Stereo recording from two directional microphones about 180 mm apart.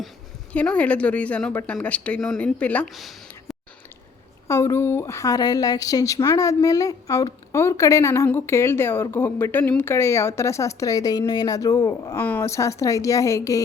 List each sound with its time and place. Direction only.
0.5 s a woman's voice: 5° left (ahead or behind)
4.4 s a woman's voice: 15° left (ahead or behind)